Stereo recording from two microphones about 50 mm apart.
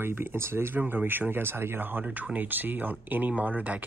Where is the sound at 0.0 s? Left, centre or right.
Right.